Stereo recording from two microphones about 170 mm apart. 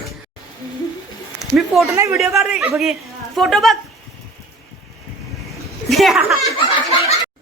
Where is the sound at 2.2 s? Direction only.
Centre (ahead or behind).